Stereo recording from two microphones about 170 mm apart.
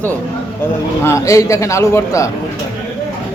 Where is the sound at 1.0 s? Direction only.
15° left (ahead or behind).